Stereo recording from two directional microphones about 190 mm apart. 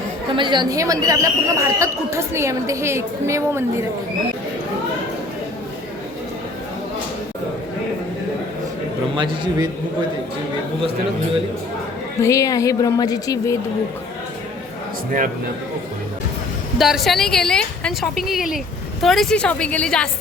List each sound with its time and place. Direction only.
0.3 s speech: 25° right (ahead or behind)
9.1 s a man's voice: 25° right (ahead or behind)
12.2 s a woman's voice: 15° left (ahead or behind)
16.7 s a woman's voice: centre (ahead or behind)